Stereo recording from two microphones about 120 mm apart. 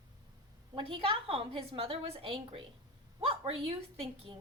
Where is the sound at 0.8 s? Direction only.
45° right (ahead or behind).